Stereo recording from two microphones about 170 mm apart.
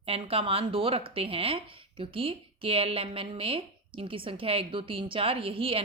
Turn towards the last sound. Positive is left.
turn(degrees=-35)  # may be behind; listen again after turning